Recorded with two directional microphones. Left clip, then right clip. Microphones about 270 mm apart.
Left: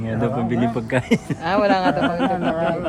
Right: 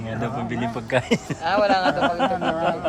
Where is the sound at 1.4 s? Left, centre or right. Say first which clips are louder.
Left 1 dB; left.